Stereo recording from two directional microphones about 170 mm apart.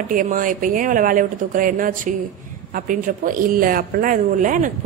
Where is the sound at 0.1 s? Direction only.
55° right (ahead or behind).